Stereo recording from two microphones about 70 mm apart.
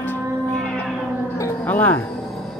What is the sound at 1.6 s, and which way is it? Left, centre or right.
Speech, left.